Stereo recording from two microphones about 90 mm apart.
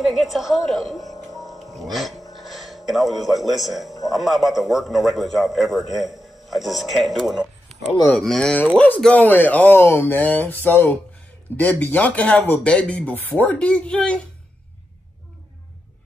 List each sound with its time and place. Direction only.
0.0 s a man's voice: centre (ahead or behind)